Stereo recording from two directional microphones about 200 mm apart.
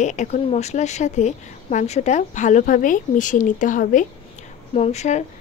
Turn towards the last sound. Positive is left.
turn(degrees=35)  # may be behind; listen again after turning